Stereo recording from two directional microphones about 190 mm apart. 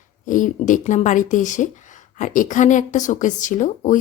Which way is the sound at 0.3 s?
45° left (ahead or behind).